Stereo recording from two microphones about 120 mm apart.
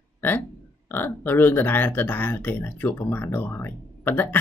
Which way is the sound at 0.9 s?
15° left (ahead or behind).